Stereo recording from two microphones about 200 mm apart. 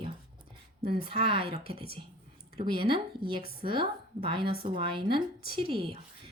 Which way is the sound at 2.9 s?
25° right (ahead or behind).